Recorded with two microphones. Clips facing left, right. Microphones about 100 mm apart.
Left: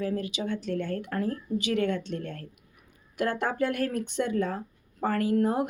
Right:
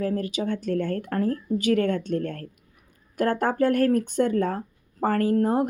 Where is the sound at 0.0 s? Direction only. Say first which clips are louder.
Right 4 dB; 45° right (ahead or behind).